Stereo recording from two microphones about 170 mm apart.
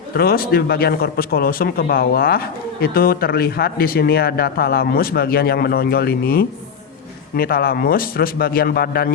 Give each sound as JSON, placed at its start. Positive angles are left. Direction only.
{"t": 0.1, "sound": "speech", "side_deg": 60}